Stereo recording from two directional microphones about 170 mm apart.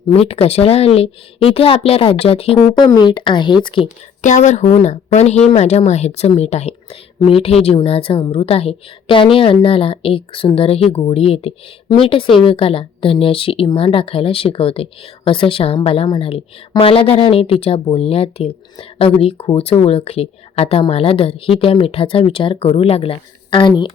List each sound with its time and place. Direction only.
0.1 s speech: 35° left (ahead or behind)
4.2 s speech: 45° left (ahead or behind); by 23.9 s 30° left (ahead or behind)